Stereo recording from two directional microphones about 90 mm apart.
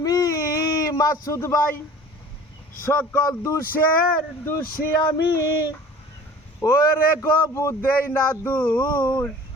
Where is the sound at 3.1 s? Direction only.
35° left (ahead or behind).